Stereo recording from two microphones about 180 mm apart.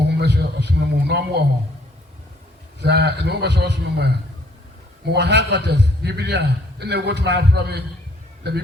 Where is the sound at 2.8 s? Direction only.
70° right (ahead or behind).